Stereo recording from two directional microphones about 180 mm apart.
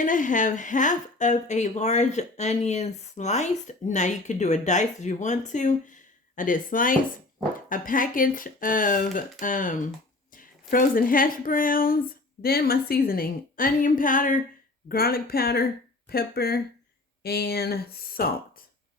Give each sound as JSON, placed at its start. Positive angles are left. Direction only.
{"t": 0.0, "sound": "a woman's voice", "side_deg": 45}